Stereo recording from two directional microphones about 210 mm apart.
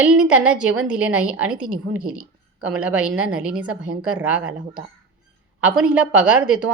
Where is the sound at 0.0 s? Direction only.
5° right (ahead or behind).